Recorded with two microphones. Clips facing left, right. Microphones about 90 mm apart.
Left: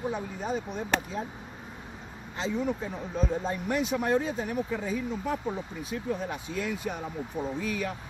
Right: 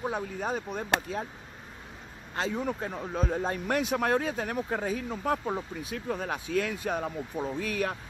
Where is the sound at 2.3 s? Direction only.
55° right (ahead or behind).